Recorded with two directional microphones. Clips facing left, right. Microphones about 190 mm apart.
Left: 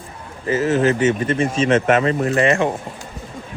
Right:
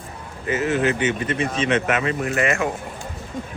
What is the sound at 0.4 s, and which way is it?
Speech, 35° left (ahead or behind).